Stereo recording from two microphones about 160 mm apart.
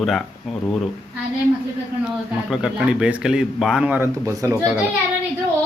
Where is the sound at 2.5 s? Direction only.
5° right (ahead or behind).